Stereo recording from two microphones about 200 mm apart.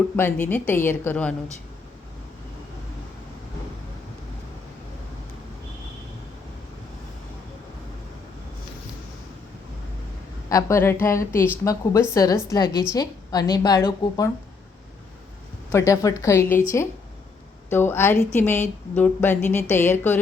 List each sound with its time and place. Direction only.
0.2 s speech: 10° left (ahead or behind)
10.5 s a woman's voice: 15° left (ahead or behind)
15.7 s speech: 15° left (ahead or behind)